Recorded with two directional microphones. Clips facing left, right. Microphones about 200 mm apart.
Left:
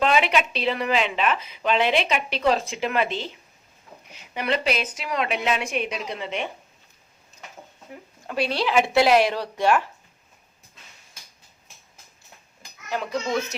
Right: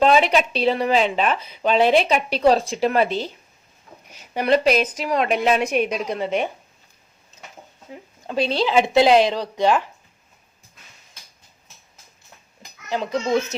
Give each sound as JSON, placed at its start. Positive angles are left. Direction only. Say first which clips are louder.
{"t": 0.0, "sound": "a woman's voice", "louder": "right 5 dB", "side_deg": -35}
{"t": 7.9, "sound": "speech", "louder": "right 4 dB", "side_deg": -25}
{"t": 12.9, "sound": "speech", "louder": "right 5 dB", "side_deg": -25}